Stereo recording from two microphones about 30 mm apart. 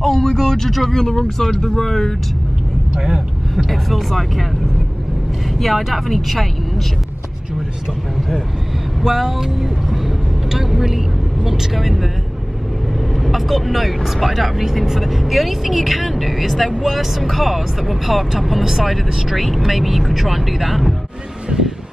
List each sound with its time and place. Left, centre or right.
0.0 s speech: centre
3.5 s speech: centre
5.6 s speech: centre
9.0 s speech: centre
13.2 s speech: centre
21.5 s vehicle: centre